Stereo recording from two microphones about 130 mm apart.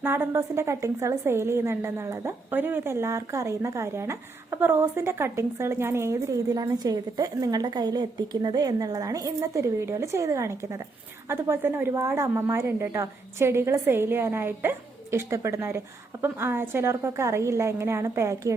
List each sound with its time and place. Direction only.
0.0 s a woman's voice: 15° right (ahead or behind)